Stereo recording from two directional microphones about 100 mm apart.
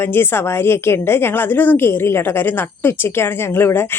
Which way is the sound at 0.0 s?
20° left (ahead or behind).